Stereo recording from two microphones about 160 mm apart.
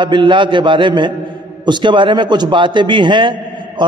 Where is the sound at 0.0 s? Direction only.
30° right (ahead or behind).